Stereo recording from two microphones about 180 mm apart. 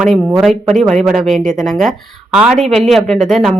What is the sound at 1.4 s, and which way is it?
Speech, 45° right (ahead or behind).